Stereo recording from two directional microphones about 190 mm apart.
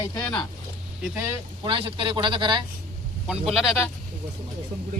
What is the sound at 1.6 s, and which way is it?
A man's voice, 25° right (ahead or behind).